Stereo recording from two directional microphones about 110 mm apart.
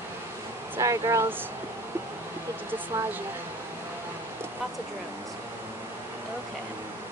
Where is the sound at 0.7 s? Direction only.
30° right (ahead or behind).